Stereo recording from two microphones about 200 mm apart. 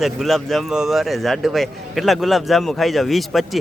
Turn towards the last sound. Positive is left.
turn(degrees=0)  # may be behind; listen again after turning